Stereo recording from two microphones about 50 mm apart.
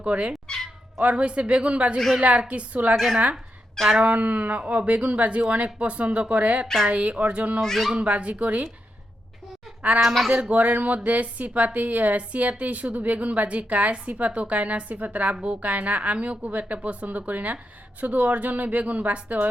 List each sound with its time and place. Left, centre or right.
0.0 s speech: right
0.4 s cat: centre
0.9 s speech: right
4.1 s speech: right
7.6 s speech: centre
7.9 s speech: right
9.8 s a woman's voice: right